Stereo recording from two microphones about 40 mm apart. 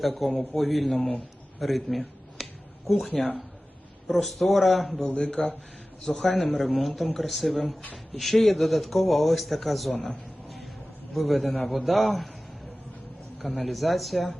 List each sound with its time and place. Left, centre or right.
0.0 s a man's voice: centre
1.5 s a sound: centre
4.1 s a man's voice: centre
5.1 s a man's voice: left
6.6 s a man's voice: centre
11.1 s a man's voice: centre
13.4 s a man's voice: centre